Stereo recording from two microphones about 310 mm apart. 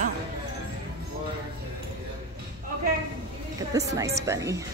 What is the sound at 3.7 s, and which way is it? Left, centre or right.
Speech, centre.